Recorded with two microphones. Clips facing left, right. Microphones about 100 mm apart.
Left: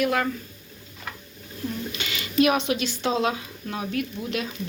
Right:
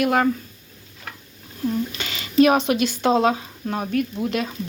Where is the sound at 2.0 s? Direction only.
35° right (ahead or behind).